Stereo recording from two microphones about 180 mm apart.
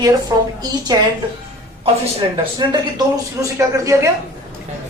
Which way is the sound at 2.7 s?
20° right (ahead or behind).